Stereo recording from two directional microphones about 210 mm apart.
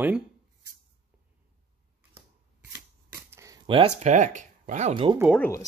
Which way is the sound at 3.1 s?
15° right (ahead or behind).